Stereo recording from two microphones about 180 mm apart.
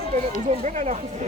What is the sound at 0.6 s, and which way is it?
Speech, 40° right (ahead or behind).